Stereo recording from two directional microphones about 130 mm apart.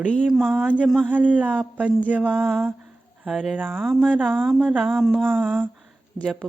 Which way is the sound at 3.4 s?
Centre (ahead or behind).